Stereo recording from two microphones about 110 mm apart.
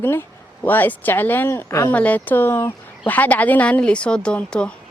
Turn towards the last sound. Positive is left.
turn(degrees=10)  # may be behind; listen again after turning